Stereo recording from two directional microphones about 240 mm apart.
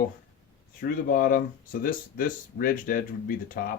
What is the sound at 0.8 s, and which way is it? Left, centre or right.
Speech, left.